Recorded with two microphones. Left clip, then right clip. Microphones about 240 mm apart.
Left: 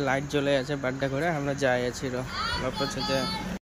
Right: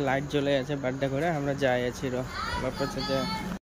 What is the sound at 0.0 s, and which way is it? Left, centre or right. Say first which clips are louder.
Speech: left 1 dB; centre.